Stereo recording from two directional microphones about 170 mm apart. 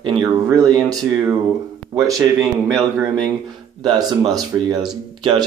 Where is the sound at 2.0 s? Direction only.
20° right (ahead or behind).